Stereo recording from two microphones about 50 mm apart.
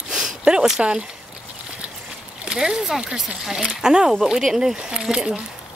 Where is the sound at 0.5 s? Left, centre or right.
Centre.